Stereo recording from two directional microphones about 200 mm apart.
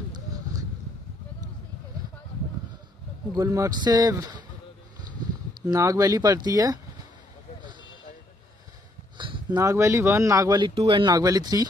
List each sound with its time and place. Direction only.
3.3 s speech: 15° right (ahead or behind)
5.7 s speech: 15° right (ahead or behind)
9.2 s speech: 25° right (ahead or behind)